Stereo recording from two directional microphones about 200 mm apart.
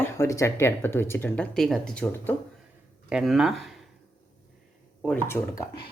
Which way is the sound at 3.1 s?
5° right (ahead or behind).